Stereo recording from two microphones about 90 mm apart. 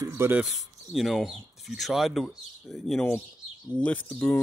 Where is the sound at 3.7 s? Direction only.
15° left (ahead or behind).